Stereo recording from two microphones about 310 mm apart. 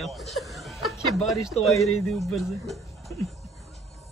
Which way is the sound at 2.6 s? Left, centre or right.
Centre.